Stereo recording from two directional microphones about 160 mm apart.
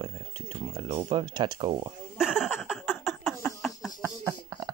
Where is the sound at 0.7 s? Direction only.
30° right (ahead or behind).